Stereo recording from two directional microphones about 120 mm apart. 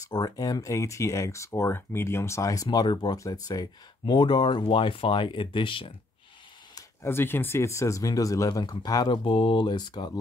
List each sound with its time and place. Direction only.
0.1 s speech: 30° left (ahead or behind)
6.7 s speech: 20° left (ahead or behind); by 10.1 s 35° left (ahead or behind)